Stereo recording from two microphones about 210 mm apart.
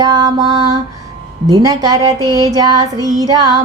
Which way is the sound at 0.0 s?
20° right (ahead or behind).